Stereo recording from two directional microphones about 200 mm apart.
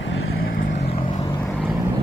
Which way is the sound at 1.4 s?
5° left (ahead or behind).